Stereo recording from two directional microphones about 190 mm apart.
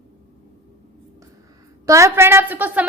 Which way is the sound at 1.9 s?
15° right (ahead or behind).